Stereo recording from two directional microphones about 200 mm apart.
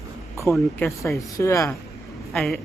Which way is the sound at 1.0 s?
15° left (ahead or behind).